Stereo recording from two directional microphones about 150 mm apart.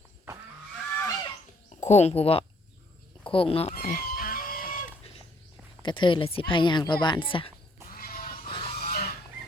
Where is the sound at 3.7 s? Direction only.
70° left (ahead or behind).